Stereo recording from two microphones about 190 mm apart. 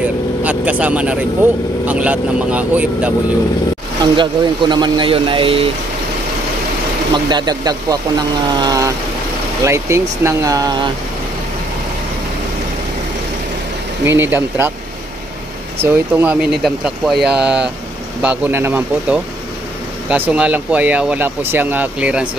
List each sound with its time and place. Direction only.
0.4 s speech: 5° right (ahead or behind)
4.0 s speech: 25° right (ahead or behind)
7.2 s speech: 20° right (ahead or behind)
14.0 s speech: 10° right (ahead or behind)
15.8 s speech: 10° right (ahead or behind)